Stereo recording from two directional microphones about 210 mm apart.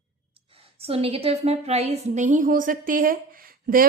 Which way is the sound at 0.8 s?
30° right (ahead or behind).